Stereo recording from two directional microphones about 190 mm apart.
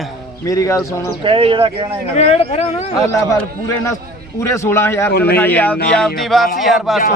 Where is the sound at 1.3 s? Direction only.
30° right (ahead or behind).